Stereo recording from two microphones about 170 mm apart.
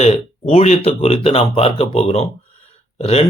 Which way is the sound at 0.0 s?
35° left (ahead or behind).